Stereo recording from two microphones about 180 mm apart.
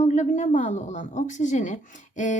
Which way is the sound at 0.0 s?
40° left (ahead or behind).